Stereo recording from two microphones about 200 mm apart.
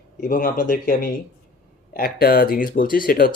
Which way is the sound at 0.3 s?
45° left (ahead or behind).